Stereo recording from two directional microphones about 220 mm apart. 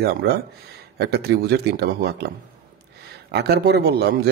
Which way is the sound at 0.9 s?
45° right (ahead or behind).